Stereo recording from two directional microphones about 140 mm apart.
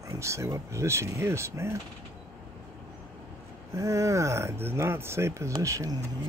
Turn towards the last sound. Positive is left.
turn(degrees=-25)  # may be behind; listen again after turning